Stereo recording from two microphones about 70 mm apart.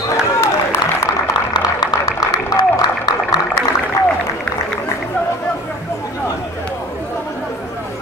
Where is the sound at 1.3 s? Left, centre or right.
Left.